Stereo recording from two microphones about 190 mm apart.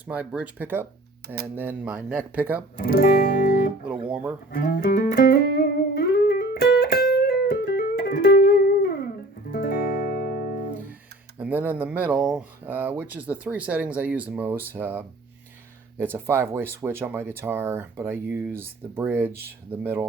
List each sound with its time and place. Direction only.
0.1 s speech: 5° right (ahead or behind)
2.7 s music: 55° left (ahead or behind)
4.1 s speech: 10° right (ahead or behind)
4.5 s music: 55° left (ahead or behind)
11.3 s speech: 10° right (ahead or behind)
16.1 s speech: 10° right (ahead or behind)